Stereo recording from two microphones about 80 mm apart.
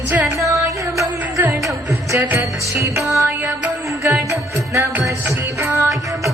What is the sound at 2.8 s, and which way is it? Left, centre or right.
Music, right.